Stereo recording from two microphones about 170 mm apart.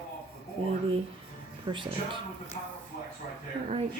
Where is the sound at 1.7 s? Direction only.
30° right (ahead or behind).